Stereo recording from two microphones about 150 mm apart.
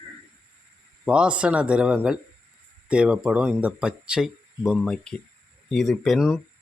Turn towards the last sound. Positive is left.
turn(degrees=0)  # may be behind; listen again after turning